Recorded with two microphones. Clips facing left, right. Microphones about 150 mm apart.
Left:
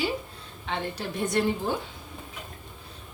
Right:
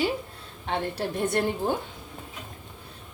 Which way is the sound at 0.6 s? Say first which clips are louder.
Right 3 dB; 55° right (ahead or behind).